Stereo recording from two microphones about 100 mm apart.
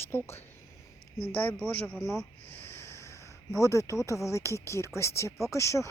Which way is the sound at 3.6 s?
30° left (ahead or behind).